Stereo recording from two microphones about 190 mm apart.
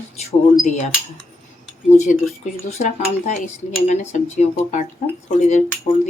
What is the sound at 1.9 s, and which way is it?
Speech, 40° left (ahead or behind).